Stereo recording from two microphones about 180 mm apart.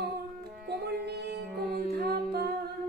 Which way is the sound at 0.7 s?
65° right (ahead or behind).